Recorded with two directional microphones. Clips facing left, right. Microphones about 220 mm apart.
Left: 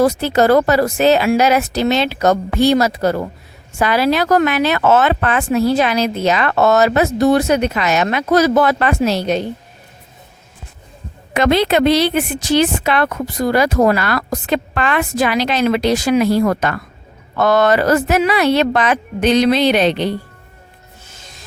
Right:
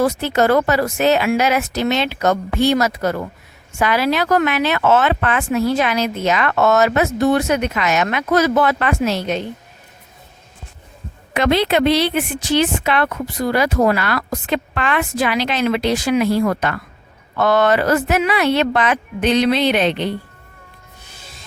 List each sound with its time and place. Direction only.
0.0 s speech: 35° left (ahead or behind)
11.3 s speech: 45° left (ahead or behind)